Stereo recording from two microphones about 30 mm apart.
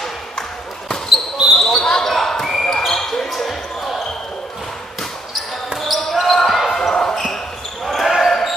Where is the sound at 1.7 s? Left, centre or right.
Left.